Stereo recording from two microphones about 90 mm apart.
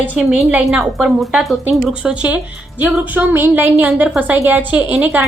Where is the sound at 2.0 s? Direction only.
15° right (ahead or behind).